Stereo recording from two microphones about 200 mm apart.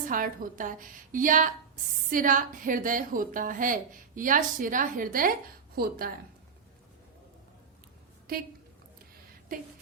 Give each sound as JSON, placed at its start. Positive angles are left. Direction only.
{"t": 0.1, "sound": "a woman's voice", "side_deg": -40}